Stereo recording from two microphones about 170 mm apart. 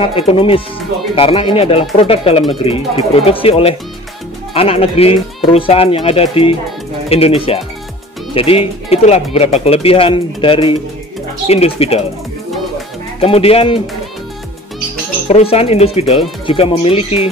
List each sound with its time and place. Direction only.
0.0 s speech: 35° left (ahead or behind)
13.2 s speech: 35° left (ahead or behind)
15.2 s speech: 35° left (ahead or behind)